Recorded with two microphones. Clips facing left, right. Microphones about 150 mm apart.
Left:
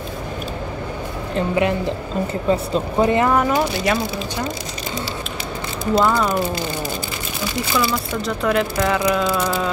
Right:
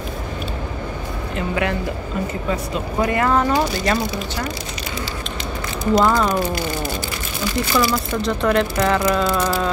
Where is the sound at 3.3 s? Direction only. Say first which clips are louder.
Even; 5° left (ahead or behind).